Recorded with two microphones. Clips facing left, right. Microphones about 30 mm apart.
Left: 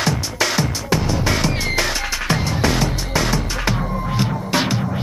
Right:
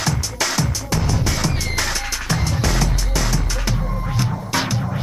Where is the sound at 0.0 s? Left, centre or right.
Left.